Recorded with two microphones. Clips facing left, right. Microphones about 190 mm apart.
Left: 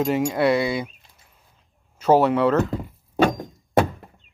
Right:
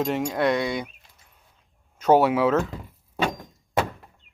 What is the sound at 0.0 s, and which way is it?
Speech, 5° left (ahead or behind).